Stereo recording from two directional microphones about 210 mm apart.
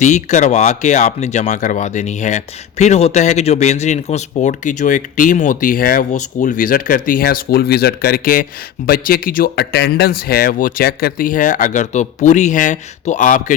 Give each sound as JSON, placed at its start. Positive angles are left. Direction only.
{"t": 0.0, "sound": "speech", "side_deg": 35}